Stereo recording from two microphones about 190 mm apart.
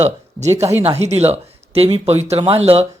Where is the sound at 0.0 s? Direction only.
35° right (ahead or behind).